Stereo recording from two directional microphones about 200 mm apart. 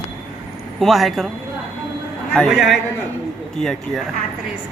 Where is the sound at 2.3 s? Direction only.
Centre (ahead or behind).